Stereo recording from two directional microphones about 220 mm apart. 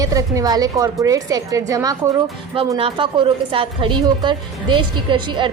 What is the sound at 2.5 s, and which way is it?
A woman's voice, 25° right (ahead or behind).